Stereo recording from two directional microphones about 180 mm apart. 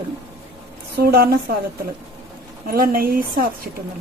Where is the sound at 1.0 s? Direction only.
60° right (ahead or behind).